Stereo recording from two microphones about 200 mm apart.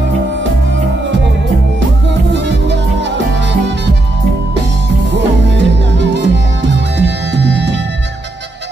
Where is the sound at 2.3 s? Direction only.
60° right (ahead or behind).